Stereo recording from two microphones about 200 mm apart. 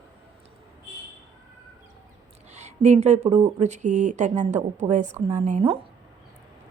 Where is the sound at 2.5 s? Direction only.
35° right (ahead or behind).